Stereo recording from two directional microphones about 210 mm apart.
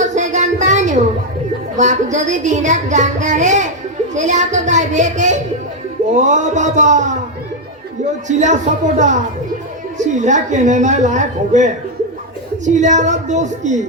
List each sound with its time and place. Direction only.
0.0 s a sound: 35° right (ahead or behind)
1.7 s speech: 35° right (ahead or behind)
8.3 s speech: 35° right (ahead or behind)